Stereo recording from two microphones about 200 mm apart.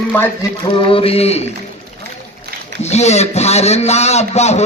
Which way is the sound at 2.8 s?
35° left (ahead or behind).